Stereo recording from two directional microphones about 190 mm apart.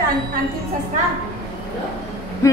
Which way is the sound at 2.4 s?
15° left (ahead or behind).